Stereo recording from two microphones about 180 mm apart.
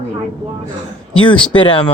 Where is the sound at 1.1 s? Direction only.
30° left (ahead or behind).